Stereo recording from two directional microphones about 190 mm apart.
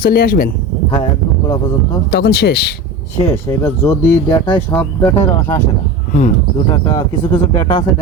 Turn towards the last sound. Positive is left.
turn(degrees=25)  # may be behind; listen again after turning